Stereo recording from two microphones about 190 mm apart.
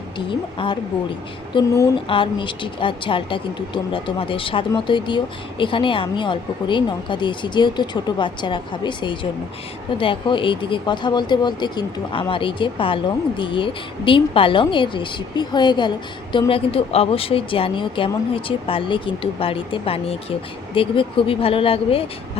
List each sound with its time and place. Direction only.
0.3 s speech: 25° left (ahead or behind)